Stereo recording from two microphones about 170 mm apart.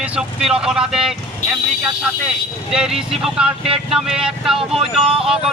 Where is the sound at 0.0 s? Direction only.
5° right (ahead or behind).